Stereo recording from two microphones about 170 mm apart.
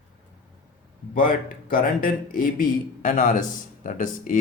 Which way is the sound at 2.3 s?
55° left (ahead or behind).